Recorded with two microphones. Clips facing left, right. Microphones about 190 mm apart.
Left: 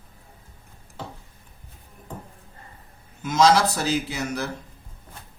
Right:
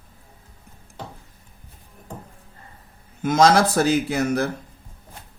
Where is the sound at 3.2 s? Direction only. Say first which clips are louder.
Right 2 dB; 55° right (ahead or behind).